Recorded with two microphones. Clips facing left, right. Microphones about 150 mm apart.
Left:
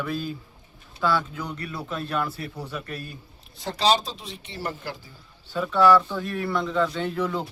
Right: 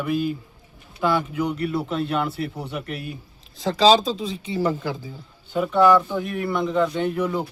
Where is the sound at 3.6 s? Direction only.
90° right.